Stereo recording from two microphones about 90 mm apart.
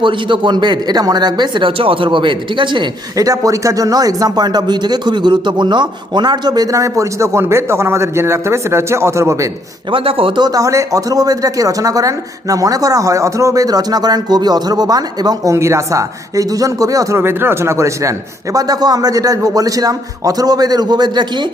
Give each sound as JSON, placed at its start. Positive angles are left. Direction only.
{"t": 0.0, "sound": "speech", "side_deg": -65}
{"t": 1.8, "sound": "speech", "side_deg": -85}
{"t": 3.2, "sound": "speech", "side_deg": -40}
{"t": 9.9, "sound": "speech", "side_deg": -90}
{"t": 10.4, "sound": "speech", "side_deg": -40}
{"t": 15.5, "sound": "speech", "side_deg": -35}
{"t": 18.5, "sound": "speech", "side_deg": -45}